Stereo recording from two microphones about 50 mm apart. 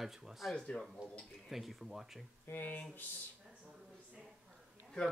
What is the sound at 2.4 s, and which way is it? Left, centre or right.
Speech, left.